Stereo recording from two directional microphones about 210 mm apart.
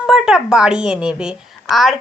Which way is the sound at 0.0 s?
5° right (ahead or behind).